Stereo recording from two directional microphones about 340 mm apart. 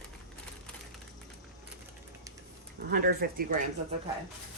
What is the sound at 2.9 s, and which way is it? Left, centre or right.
Speech, right.